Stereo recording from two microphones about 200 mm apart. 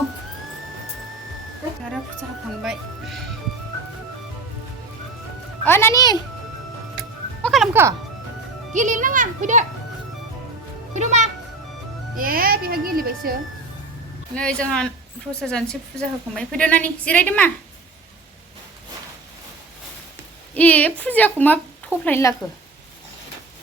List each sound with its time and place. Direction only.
2.6 s speech: centre (ahead or behind)
5.6 s a woman's voice: 10° left (ahead or behind)
7.4 s music: centre (ahead or behind)
8.7 s a child's voice: 40° right (ahead or behind)
10.9 s a child's voice: 35° right (ahead or behind)
14.3 s a woman's voice: 5° left (ahead or behind)
20.5 s a woman's voice: 5° left (ahead or behind)